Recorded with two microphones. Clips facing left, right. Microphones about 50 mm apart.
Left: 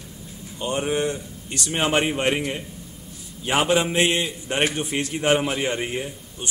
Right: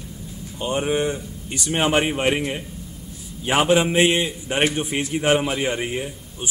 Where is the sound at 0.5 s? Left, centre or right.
Centre.